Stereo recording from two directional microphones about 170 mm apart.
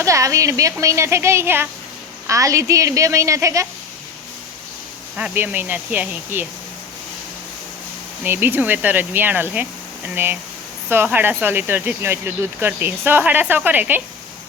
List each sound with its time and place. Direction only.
0.0 s speech: 20° right (ahead or behind)
5.1 s speech: 10° right (ahead or behind)
8.2 s speech: 10° right (ahead or behind)